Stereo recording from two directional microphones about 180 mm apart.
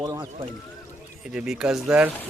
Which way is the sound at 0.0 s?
20° right (ahead or behind).